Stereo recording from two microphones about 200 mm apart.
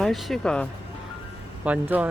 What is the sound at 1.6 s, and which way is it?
Speech, 5° right (ahead or behind).